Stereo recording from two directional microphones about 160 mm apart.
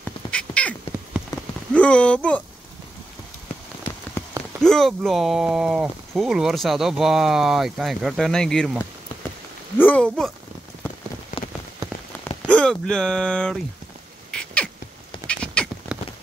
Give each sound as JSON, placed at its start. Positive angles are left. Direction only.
{"t": 0.3, "sound": "cat", "side_deg": 5}
{"t": 1.7, "sound": "speech", "side_deg": 5}
{"t": 4.2, "sound": "a sound", "side_deg": 15}
{"t": 4.6, "sound": "speech", "side_deg": 0}
{"t": 9.8, "sound": "speech", "side_deg": 10}
{"t": 12.4, "sound": "speech", "side_deg": 5}
{"t": 14.3, "sound": "cat", "side_deg": 5}